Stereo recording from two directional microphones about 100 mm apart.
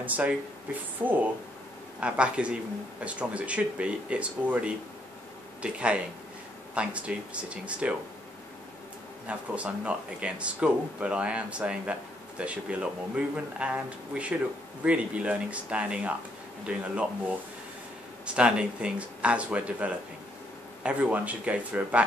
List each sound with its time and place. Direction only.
0.0 s speech: 15° right (ahead or behind)
9.3 s speech: 10° right (ahead or behind)